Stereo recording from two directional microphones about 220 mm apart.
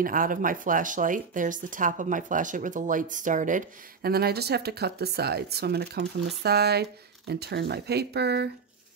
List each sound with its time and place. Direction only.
0.0 s speech: 40° right (ahead or behind)